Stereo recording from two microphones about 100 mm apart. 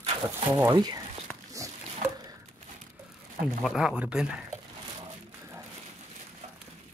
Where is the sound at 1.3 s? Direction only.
10° left (ahead or behind).